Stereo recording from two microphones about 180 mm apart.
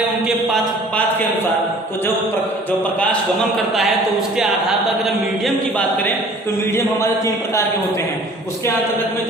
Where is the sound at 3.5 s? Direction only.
Centre (ahead or behind).